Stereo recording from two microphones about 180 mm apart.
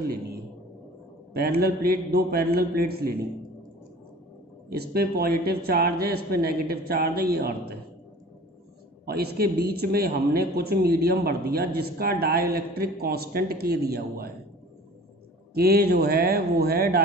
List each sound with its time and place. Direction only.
1.3 s a man's voice: 60° right (ahead or behind)
4.6 s a man's voice: 60° right (ahead or behind)
9.0 s a man's voice: 60° right (ahead or behind)
15.5 s a man's voice: 60° right (ahead or behind)